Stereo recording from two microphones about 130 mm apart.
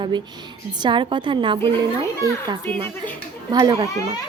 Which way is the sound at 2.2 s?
30° right (ahead or behind).